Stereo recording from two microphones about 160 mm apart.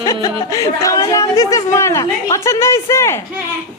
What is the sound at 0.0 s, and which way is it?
A woman's voice, 20° left (ahead or behind).